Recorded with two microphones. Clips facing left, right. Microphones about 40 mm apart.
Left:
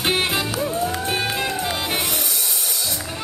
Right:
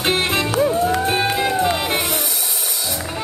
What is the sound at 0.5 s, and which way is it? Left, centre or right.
Music, centre.